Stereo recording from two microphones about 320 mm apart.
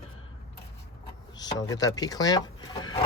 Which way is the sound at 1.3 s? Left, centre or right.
Centre.